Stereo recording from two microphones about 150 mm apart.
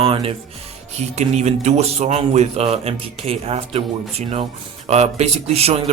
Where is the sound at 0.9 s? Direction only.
50° right (ahead or behind).